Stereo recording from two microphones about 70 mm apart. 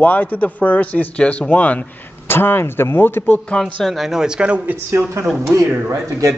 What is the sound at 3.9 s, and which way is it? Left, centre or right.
Speech, centre.